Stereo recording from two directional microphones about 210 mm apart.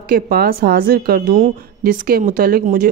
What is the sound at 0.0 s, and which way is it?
A woman's voice, 45° right (ahead or behind).